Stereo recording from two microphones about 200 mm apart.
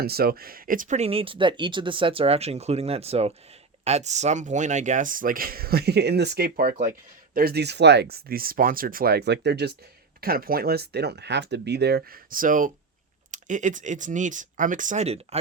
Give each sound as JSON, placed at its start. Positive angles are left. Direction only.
{"t": 0.0, "sound": "speech", "side_deg": -50}